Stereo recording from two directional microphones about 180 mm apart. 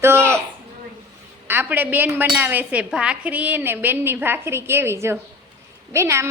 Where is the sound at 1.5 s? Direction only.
10° right (ahead or behind).